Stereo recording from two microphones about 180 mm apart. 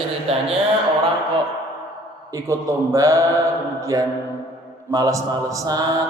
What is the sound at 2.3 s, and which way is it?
Speech, 15° right (ahead or behind).